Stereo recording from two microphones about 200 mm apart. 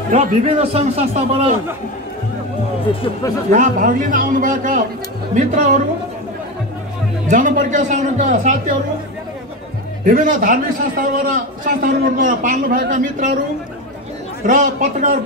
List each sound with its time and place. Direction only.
0.1 s a man's voice: 30° right (ahead or behind)
3.5 s a man's voice: 40° right (ahead or behind)
7.2 s a man's voice: 40° right (ahead or behind)
10.0 s a man's voice: 40° right (ahead or behind)
14.4 s a man's voice: 40° right (ahead or behind)